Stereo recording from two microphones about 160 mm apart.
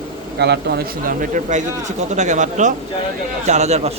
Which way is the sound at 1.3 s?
50° right (ahead or behind).